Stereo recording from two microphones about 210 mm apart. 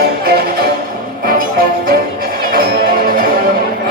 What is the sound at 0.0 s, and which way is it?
Music, 45° right (ahead or behind).